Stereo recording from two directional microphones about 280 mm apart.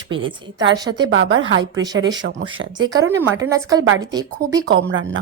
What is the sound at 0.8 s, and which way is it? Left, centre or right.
Speech, centre.